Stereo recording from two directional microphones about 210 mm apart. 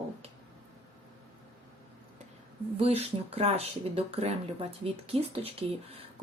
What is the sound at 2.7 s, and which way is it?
Speech, 30° right (ahead or behind).